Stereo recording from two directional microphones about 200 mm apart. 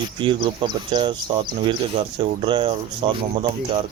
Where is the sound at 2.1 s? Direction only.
25° right (ahead or behind).